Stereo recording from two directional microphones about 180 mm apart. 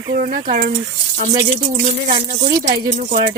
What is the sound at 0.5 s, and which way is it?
A woman's voice, 50° right (ahead or behind).